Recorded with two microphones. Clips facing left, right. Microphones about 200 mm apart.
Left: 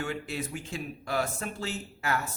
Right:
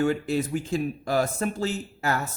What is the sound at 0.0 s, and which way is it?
Speech, 40° right (ahead or behind).